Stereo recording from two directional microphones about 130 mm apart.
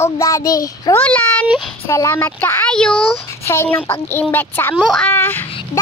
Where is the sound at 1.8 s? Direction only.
25° left (ahead or behind).